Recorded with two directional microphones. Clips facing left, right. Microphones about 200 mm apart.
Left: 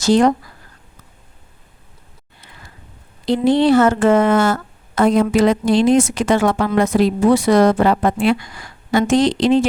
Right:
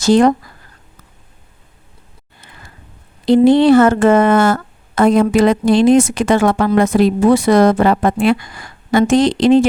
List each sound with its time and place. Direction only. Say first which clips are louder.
0.0 s a woman's voice: right 3 dB; 50° right (ahead or behind)
3.2 s a woman's voice: right 5 dB; 55° right (ahead or behind)